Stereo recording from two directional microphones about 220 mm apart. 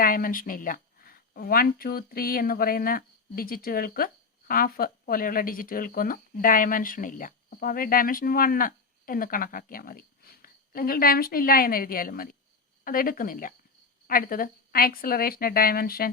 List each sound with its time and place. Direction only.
0.0 s a woman's voice: 40° left (ahead or behind)